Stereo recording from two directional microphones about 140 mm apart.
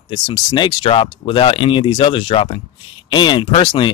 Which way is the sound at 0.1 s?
30° left (ahead or behind).